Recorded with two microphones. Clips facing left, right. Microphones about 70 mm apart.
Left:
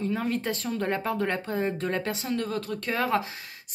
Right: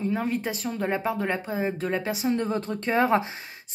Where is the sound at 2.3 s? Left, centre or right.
Right.